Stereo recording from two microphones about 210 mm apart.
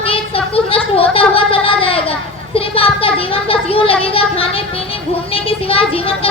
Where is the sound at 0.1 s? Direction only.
25° left (ahead or behind).